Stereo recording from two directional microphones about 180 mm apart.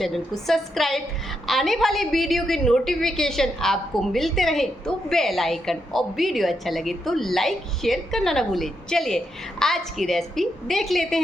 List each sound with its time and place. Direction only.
0.0 s a woman's voice: centre (ahead or behind)